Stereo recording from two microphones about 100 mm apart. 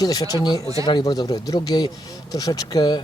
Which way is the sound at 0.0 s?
40° left (ahead or behind).